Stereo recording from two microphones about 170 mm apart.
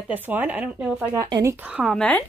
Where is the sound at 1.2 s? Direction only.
25° right (ahead or behind).